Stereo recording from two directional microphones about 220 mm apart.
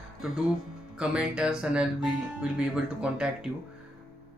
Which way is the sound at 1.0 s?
5° right (ahead or behind).